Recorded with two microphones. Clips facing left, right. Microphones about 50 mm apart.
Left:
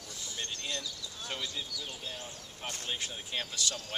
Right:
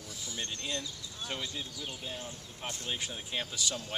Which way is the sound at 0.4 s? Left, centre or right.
Centre.